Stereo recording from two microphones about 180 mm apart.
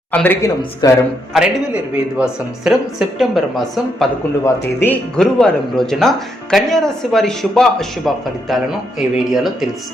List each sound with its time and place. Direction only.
0.1 s a man's voice: 10° left (ahead or behind)
0.8 s speech: 25° left (ahead or behind)
1.3 s speech: 5° right (ahead or behind)
4.4 s speech: 10° left (ahead or behind)